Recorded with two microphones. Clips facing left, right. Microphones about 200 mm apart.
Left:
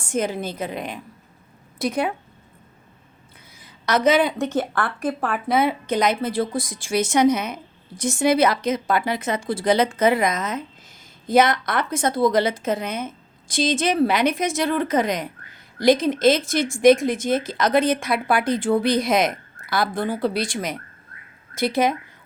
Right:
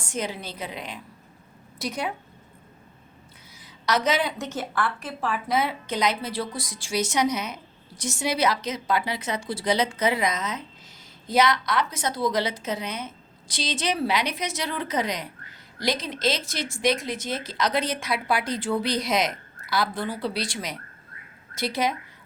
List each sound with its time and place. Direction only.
0.0 s a woman's voice: 50° left (ahead or behind)
3.6 s a woman's voice: 55° left (ahead or behind)